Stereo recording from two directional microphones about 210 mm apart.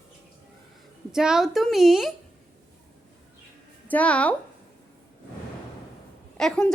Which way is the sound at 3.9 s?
5° left (ahead or behind).